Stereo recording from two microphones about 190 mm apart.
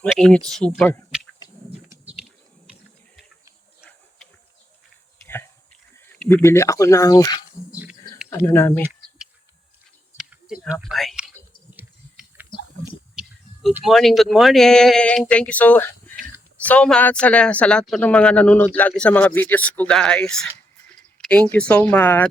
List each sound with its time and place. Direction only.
0.0 s a man's voice: 5° left (ahead or behind)
6.1 s speech: 10° left (ahead or behind)
8.8 s a sound: 5° right (ahead or behind)
10.2 s whispering: 5° right (ahead or behind)
11.7 s a sound: 10° right (ahead or behind)
13.7 s a man's voice: centre (ahead or behind)